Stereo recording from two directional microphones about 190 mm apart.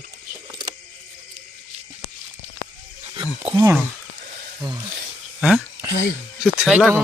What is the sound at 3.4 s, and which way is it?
Speech, 25° right (ahead or behind).